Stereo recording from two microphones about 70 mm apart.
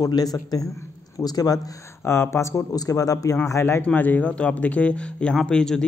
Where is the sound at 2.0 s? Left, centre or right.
Left.